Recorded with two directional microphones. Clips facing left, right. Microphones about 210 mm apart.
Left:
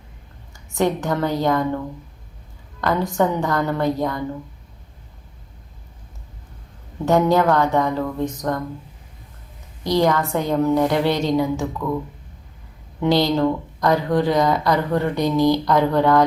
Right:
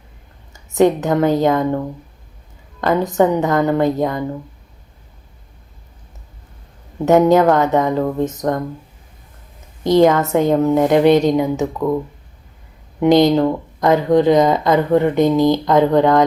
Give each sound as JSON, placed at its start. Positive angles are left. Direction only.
{"t": 0.7, "sound": "speech", "side_deg": -20}
{"t": 2.8, "sound": "speech", "side_deg": -20}
{"t": 7.0, "sound": "speech", "side_deg": -20}
{"t": 9.9, "sound": "speech", "side_deg": -20}
{"t": 13.0, "sound": "speech", "side_deg": -20}